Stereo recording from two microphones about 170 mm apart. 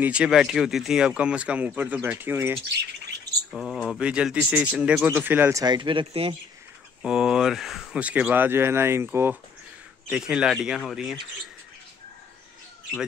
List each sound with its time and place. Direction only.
0.0 s speech: 5° right (ahead or behind)
2.7 s bird: 75° right (ahead or behind)
3.5 s speech: centre (ahead or behind); by 6.3 s 35° right (ahead or behind)
7.0 s speech: 5° right (ahead or behind)